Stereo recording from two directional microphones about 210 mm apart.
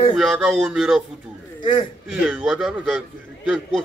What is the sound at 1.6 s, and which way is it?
Speech, 25° left (ahead or behind).